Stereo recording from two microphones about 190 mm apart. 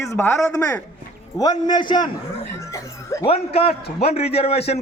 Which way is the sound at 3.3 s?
30° left (ahead or behind).